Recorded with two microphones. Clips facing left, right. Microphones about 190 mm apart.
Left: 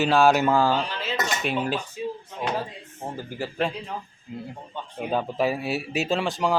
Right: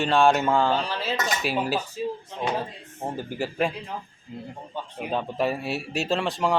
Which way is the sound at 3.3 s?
15° right (ahead or behind).